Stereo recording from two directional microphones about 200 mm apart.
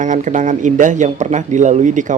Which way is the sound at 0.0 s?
40° right (ahead or behind).